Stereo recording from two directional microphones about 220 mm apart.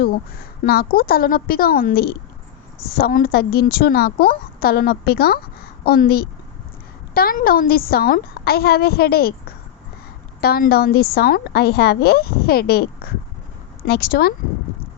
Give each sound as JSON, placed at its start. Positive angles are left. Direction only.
{"t": 0.6, "sound": "a woman's voice", "side_deg": 45}
{"t": 10.4, "sound": "a woman's voice", "side_deg": 45}
{"t": 13.8, "sound": "a woman's voice", "side_deg": 45}